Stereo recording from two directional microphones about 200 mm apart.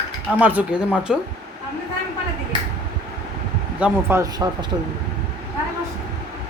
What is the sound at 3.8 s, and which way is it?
Speech, 10° right (ahead or behind).